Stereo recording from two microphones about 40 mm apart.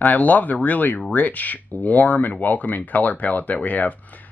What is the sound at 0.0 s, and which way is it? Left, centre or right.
Speech, left.